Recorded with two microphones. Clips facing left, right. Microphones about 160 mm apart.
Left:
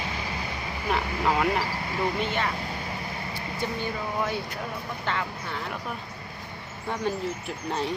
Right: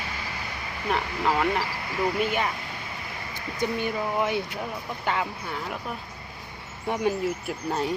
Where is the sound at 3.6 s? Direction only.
15° right (ahead or behind).